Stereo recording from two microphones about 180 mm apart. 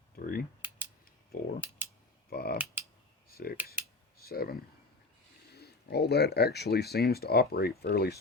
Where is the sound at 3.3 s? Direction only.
55° left (ahead or behind).